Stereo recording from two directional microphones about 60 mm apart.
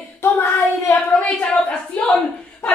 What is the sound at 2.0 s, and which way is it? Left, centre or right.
Speech, left.